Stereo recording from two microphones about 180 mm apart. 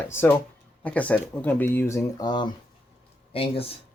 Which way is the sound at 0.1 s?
15° left (ahead or behind).